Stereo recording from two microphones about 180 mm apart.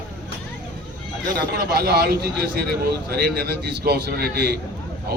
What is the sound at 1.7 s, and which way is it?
A man's voice, 60° right (ahead or behind).